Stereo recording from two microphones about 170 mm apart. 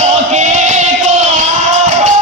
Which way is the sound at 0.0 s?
45° right (ahead or behind).